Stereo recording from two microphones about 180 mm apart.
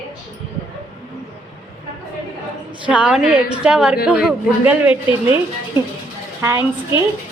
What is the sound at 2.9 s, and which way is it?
A woman's voice, 5° right (ahead or behind).